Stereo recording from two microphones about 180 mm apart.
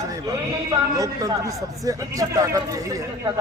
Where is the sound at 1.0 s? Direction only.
20° right (ahead or behind).